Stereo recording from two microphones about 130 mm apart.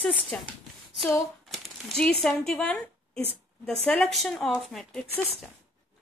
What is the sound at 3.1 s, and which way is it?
Speech, 50° right (ahead or behind).